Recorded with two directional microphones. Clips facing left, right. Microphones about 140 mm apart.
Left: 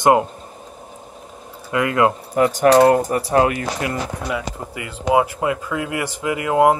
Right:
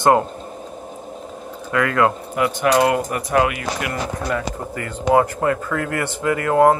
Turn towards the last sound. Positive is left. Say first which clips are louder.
# right 1 dB
turn(degrees=15)  # may be behind; listen again after turning